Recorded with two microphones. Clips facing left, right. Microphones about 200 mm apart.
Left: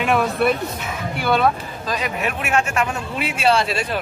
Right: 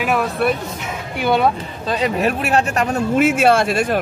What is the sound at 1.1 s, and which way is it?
Speech, 15° right (ahead or behind).